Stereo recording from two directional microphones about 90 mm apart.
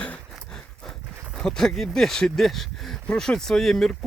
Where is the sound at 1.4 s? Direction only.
5° left (ahead or behind).